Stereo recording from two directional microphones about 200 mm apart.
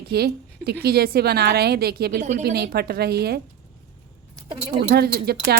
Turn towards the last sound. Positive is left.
turn(degrees=-55)  # may be behind; listen again after turning